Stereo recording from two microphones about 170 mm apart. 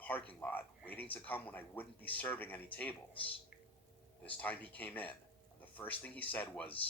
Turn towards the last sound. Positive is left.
turn(degrees=10)  # may be behind; listen again after turning